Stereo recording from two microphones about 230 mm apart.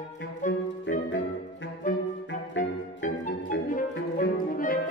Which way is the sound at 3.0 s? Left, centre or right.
Left.